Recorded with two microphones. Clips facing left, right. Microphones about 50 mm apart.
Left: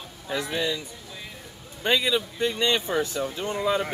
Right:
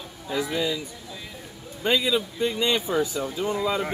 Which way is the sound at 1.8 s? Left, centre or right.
Left.